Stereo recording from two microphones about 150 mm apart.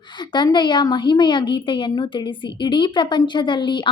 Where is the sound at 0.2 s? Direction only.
30° left (ahead or behind).